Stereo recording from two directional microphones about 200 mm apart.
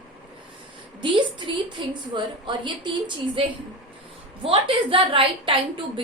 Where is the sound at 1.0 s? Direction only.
25° right (ahead or behind).